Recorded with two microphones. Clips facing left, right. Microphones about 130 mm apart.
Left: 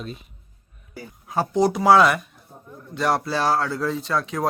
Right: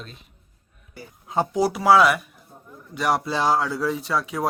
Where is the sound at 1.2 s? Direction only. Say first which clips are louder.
Right 1 dB; 20° right (ahead or behind).